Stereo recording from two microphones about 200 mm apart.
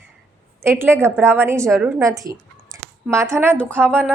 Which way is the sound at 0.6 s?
10° right (ahead or behind).